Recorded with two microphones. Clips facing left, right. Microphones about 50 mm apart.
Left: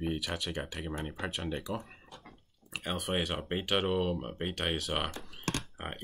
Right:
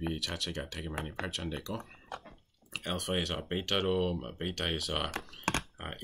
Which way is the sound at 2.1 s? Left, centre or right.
Right.